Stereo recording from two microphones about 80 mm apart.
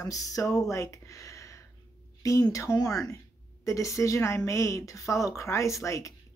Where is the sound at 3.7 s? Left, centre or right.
Left.